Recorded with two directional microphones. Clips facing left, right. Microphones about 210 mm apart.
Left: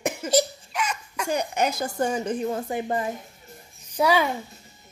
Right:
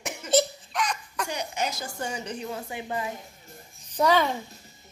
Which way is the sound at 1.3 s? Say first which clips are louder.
Left 8 dB; 55° left (ahead or behind).